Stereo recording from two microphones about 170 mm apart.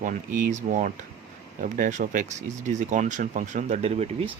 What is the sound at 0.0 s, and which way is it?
Speech, 50° right (ahead or behind).